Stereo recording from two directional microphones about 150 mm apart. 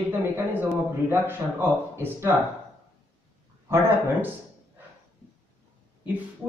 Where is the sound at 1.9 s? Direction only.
15° right (ahead or behind).